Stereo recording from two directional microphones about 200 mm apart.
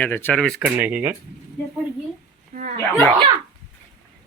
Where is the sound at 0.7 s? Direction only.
5° right (ahead or behind).